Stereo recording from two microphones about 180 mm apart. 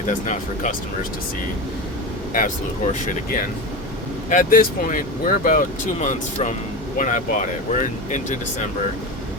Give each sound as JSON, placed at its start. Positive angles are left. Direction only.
{"t": 0.1, "sound": "speech", "side_deg": 40}
{"t": 2.3, "sound": "speech", "side_deg": 45}